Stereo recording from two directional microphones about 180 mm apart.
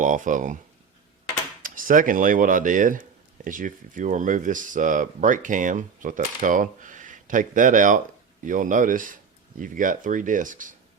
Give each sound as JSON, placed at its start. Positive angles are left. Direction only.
{"t": 0.0, "sound": "speech", "side_deg": -45}
{"t": 1.6, "sound": "speech", "side_deg": -50}